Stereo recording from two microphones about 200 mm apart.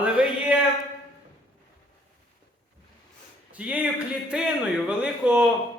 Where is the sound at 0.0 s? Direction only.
5° right (ahead or behind).